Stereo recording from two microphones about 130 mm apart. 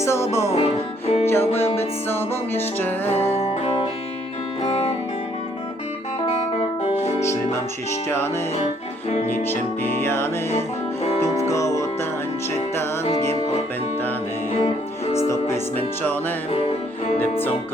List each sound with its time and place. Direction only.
0.0 s music: 20° left (ahead or behind)
0.5 s music: 50° left (ahead or behind)
1.3 s music: 15° left (ahead or behind)
1.6 s music: 50° left (ahead or behind)
2.0 s music: 15° left (ahead or behind)
3.3 s music: 45° left (ahead or behind)
8.1 s music: 15° left (ahead or behind)
9.0 s music: 50° left (ahead or behind)
9.3 s music: 15° left (ahead or behind)
11.3 s music: 25° left (ahead or behind)
14.5 s music: 50° left (ahead or behind)
15.3 s speech: 20° left (ahead or behind)
16.5 s music: 45° left (ahead or behind)